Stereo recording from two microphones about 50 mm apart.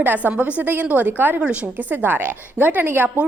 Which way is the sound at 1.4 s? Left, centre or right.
Right.